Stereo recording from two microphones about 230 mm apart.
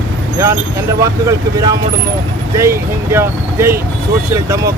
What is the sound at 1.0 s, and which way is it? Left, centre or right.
Speech, centre.